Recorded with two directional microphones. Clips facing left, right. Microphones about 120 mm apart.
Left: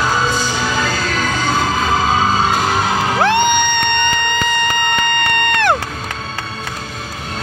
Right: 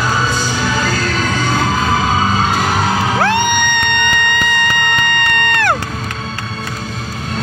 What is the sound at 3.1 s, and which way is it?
Music, 20° left (ahead or behind).